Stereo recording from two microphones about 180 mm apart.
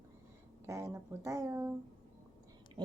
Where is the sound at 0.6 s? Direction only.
15° right (ahead or behind).